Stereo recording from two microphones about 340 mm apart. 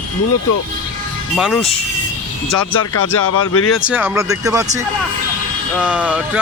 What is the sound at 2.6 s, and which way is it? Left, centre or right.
Speech, left.